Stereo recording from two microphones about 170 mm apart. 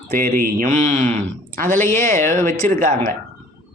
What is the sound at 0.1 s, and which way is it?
Speech, 55° right (ahead or behind).